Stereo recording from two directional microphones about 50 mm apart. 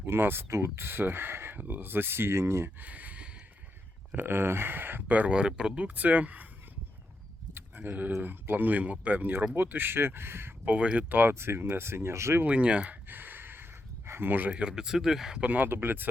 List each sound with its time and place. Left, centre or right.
0.0 s speech: right
1.5 s speech: right
2.8 s a sound: right
4.1 s speech: right
5.3 s speech: centre
5.8 s speech: right
7.5 s sheep: right
8.2 s speech: right
11.1 s speech: right
11.3 s speech: right
12.5 s speech: right
13.1 s a sound: right
14.5 s speech: centre
15.4 s speech: right